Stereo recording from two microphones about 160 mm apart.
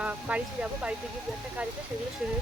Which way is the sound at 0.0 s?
10° right (ahead or behind).